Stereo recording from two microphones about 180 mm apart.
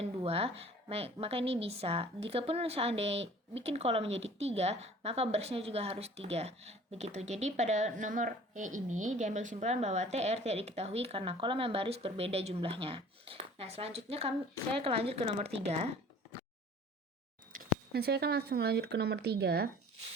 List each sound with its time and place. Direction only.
0.0 s a woman's voice: 35° right (ahead or behind)
17.5 s speech: 60° right (ahead or behind)